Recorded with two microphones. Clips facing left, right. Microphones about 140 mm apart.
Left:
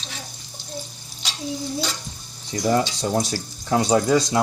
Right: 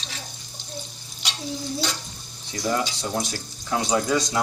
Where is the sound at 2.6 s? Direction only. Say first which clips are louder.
Left 5 dB; 35° left (ahead or behind).